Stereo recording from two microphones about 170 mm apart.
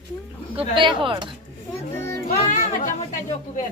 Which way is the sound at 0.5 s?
30° right (ahead or behind).